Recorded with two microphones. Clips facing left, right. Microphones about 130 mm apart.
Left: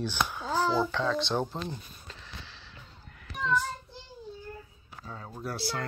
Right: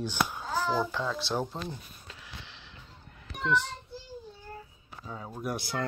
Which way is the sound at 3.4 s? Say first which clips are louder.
Even; 75° right (ahead or behind).